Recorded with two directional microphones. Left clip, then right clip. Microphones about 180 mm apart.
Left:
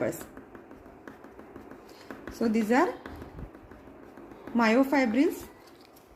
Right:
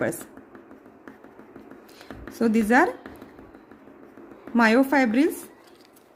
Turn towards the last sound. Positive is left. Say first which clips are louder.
# right 4 dB
turn(degrees=-50)  # may be behind; listen again after turning